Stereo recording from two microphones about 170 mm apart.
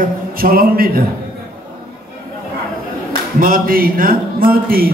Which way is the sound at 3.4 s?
55° right (ahead or behind).